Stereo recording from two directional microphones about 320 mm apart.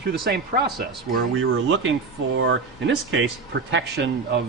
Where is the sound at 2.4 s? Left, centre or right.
Right.